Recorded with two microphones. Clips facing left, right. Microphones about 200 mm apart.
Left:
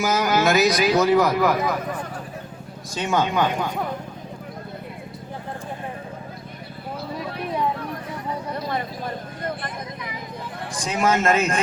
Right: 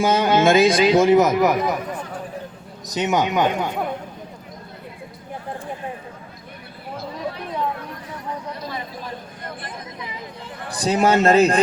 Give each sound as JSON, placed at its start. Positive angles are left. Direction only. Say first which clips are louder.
{"t": 0.0, "sound": "a man's voice", "louder": "right 4 dB", "side_deg": -30}
{"t": 2.9, "sound": "a man's voice", "louder": "right 2 dB", "side_deg": -20}
{"t": 10.8, "sound": "speech", "louder": "right 5 dB", "side_deg": -35}